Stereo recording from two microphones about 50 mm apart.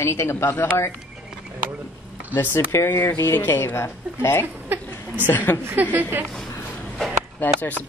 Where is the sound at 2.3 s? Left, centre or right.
Left.